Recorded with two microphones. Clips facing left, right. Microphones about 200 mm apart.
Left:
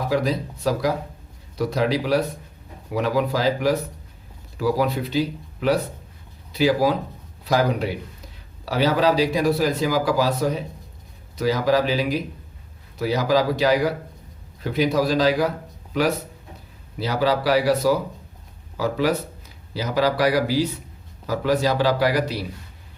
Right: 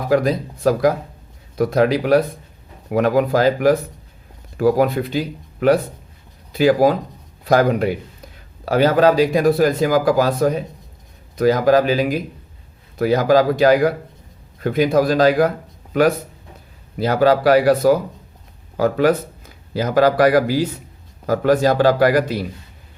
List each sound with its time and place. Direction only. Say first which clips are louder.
0.1 s a man's voice: right 8 dB; 50° right (ahead or behind)